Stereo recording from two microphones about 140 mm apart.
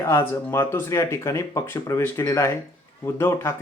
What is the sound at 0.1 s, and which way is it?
Speech, 20° left (ahead or behind).